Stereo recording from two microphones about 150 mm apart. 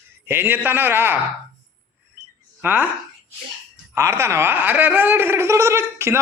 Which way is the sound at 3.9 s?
20° right (ahead or behind).